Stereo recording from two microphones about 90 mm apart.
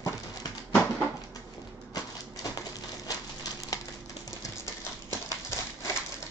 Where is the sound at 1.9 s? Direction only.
45° left (ahead or behind).